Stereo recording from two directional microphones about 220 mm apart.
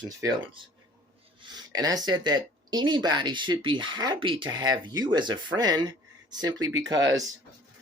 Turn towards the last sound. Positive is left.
turn(degrees=-15)  # may be behind; listen again after turning